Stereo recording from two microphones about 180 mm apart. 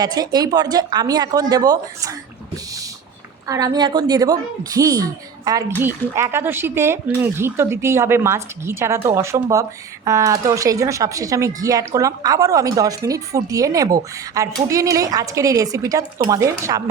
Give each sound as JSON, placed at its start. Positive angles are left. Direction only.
{"t": 0.0, "sound": "a woman's voice", "side_deg": -20}
{"t": 3.4, "sound": "a woman's voice", "side_deg": -20}